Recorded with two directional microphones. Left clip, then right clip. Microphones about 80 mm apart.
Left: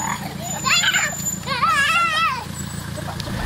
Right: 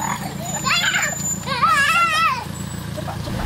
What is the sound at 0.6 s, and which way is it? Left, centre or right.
Children playing, centre.